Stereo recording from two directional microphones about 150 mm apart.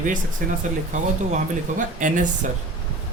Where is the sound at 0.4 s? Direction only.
65° right (ahead or behind).